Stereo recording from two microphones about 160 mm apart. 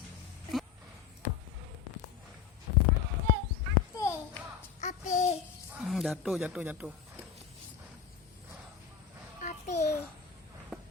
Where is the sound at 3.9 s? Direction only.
20° left (ahead or behind).